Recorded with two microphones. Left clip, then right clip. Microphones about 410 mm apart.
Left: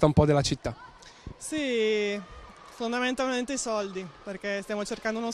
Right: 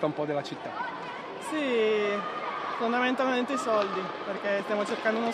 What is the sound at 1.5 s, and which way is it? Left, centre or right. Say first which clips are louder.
Music: even; left.